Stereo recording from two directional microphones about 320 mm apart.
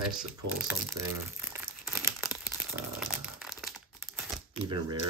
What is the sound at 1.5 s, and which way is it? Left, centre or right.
Crumpling, centre.